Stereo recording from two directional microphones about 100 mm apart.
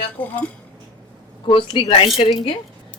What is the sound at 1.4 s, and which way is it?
Speech, 55° left (ahead or behind).